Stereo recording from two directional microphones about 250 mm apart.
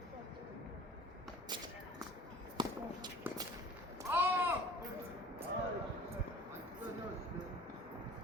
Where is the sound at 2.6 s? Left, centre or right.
Centre.